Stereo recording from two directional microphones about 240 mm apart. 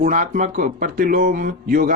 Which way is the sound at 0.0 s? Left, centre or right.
Right.